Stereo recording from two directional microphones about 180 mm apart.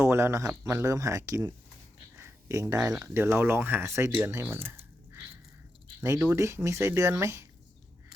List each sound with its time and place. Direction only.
0.0 s speech: 15° right (ahead or behind)
2.1 s a sound: 15° right (ahead or behind)
3.0 s speech: 15° right (ahead or behind)
4.5 s squish: 10° right (ahead or behind)
6.0 s speech: 15° right (ahead or behind)